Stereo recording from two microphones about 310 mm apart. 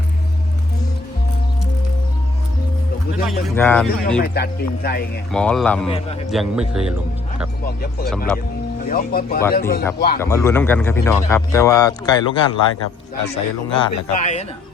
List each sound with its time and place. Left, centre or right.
3.2 s speech: centre
4.2 s speech: left
5.3 s speech: centre
7.6 s speech: left
10.2 s speech: centre